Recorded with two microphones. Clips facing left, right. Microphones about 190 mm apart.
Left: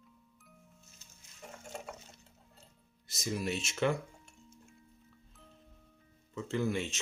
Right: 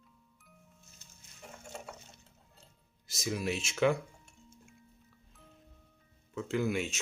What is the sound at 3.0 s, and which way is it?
Music, 90° right.